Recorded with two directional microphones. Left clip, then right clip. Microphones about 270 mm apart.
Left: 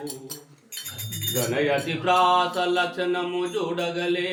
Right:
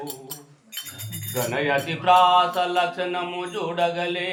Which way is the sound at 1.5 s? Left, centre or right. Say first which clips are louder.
Right 1 dB; centre.